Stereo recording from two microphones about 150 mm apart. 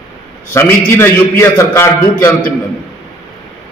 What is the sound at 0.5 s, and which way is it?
A man's voice, 15° left (ahead or behind).